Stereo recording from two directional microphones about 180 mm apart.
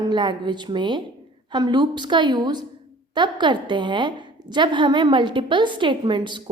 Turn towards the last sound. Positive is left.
turn(degrees=-25)  # may be behind; listen again after turning